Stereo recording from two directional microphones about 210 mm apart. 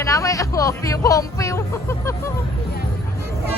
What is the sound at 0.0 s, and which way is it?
Speech, 15° left (ahead or behind).